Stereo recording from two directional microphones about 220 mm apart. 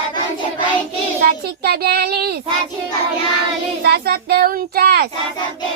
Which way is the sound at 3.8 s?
45° right (ahead or behind).